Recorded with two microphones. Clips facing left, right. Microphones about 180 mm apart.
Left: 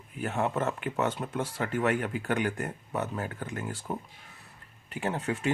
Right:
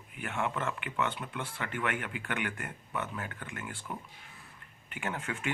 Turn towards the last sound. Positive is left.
turn(degrees=35)  # may be behind; listen again after turning